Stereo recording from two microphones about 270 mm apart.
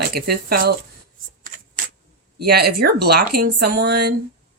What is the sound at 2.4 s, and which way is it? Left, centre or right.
Speech, right.